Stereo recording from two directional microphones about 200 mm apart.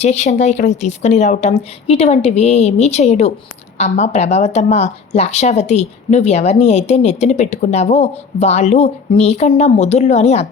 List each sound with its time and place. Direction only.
0.0 s speech: 35° left (ahead or behind)